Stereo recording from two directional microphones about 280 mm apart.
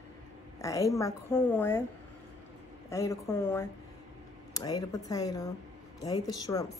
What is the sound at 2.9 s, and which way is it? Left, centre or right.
Speech, centre.